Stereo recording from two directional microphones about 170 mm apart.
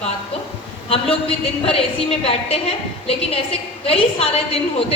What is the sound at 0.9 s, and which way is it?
A woman's voice, 35° left (ahead or behind).